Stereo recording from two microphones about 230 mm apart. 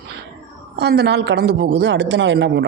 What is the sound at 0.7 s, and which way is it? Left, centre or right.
Speech, right.